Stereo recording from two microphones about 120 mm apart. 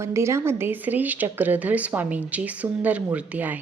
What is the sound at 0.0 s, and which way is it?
A woman's voice, 25° right (ahead or behind).